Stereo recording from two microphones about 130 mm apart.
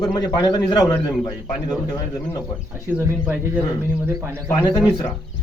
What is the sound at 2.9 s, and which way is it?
A man's voice, 10° right (ahead or behind).